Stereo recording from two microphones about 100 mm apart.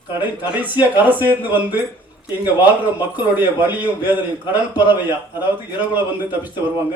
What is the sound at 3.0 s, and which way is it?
A man's voice, 20° right (ahead or behind).